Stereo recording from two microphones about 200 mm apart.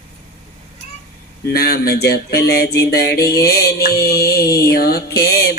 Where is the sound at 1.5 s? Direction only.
50° left (ahead or behind).